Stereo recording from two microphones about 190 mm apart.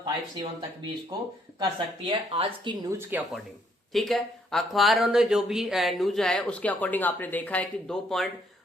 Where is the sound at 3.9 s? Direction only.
Centre (ahead or behind).